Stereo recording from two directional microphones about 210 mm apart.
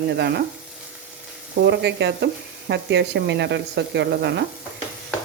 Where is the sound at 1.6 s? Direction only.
55° right (ahead or behind).